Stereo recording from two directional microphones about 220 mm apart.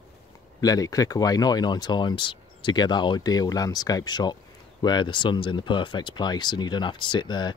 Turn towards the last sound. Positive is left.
turn(degrees=20)  # may be behind; listen again after turning